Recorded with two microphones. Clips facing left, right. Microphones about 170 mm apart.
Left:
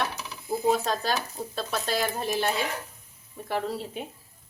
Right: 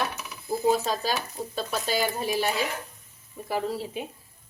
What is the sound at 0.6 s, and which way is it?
Speech, centre (ahead or behind).